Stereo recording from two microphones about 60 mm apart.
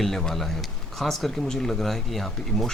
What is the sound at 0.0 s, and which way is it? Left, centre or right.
Speech, centre.